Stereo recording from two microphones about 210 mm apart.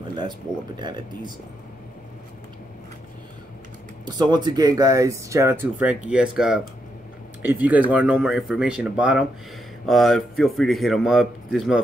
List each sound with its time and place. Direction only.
0.0 s a sound: 20° right (ahead or behind)
0.7 s speech: 20° right (ahead or behind)
4.1 s speech: 20° right (ahead or behind); by 11.8 s centre (ahead or behind)